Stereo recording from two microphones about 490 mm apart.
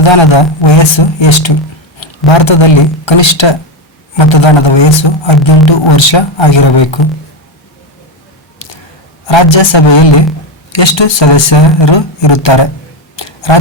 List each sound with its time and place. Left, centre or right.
0.0 s a man's voice: left
9.2 s a man's voice: left
13.1 s a sound: left